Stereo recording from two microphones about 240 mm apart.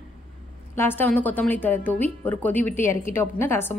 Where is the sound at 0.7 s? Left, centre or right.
Centre.